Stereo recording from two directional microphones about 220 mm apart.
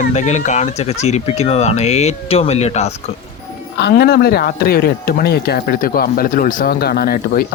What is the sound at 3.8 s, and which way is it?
Speech, 50° left (ahead or behind).